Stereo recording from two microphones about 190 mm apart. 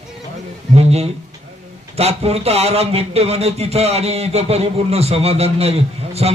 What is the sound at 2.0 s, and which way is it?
Speech, 35° right (ahead or behind).